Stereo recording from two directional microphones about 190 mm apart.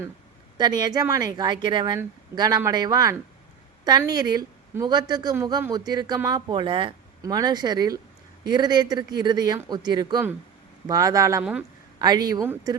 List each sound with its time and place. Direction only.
0.5 s a woman's voice: 20° right (ahead or behind)